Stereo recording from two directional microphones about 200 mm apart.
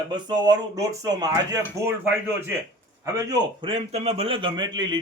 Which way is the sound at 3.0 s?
20° right (ahead or behind).